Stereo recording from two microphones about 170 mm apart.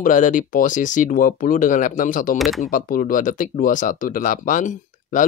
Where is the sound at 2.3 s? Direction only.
Centre (ahead or behind).